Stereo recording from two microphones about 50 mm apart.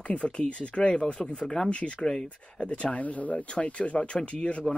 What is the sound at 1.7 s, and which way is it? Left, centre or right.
Speech, left.